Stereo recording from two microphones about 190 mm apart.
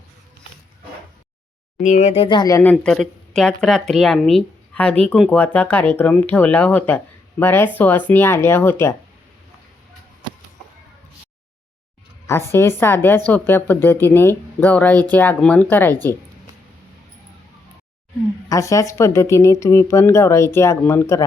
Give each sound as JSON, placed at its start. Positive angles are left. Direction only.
{"t": 1.8, "sound": "speech", "side_deg": 40}
{"t": 2.7, "sound": "speech", "side_deg": 0}
{"t": 12.3, "sound": "speech", "side_deg": 15}
{"t": 18.4, "sound": "speech", "side_deg": 15}